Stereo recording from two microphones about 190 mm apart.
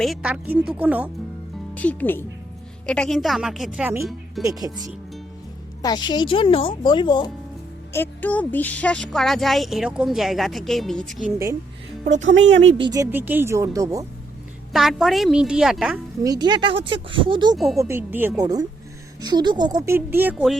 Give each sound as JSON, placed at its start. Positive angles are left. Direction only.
{"t": 0.0, "sound": "speech", "side_deg": -5}
{"t": 1.7, "sound": "speech", "side_deg": 5}
{"t": 4.4, "sound": "speech", "side_deg": -20}
{"t": 5.8, "sound": "a woman's voice", "side_deg": 20}
{"t": 7.9, "sound": "speech", "side_deg": 10}
{"t": 12.0, "sound": "speech", "side_deg": -40}
{"t": 12.3, "sound": "a woman's voice", "side_deg": -70}
{"t": 12.8, "sound": "speech", "side_deg": -20}
{"t": 14.7, "sound": "speech", "side_deg": 0}
{"t": 16.2, "sound": "speech", "side_deg": -20}
{"t": 17.7, "sound": "speech", "side_deg": -15}